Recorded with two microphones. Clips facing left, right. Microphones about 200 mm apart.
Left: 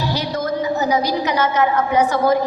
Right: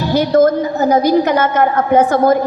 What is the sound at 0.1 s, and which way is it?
A woman's voice, 50° right (ahead or behind).